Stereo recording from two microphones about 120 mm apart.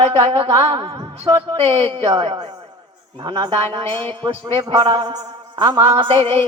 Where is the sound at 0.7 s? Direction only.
35° right (ahead or behind).